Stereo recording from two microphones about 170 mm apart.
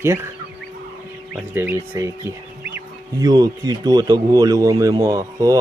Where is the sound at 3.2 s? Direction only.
20° right (ahead or behind).